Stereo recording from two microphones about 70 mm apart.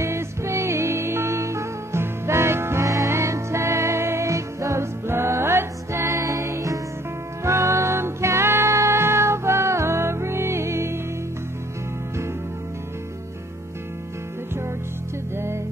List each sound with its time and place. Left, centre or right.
0.0 s music: right
15.3 s music: right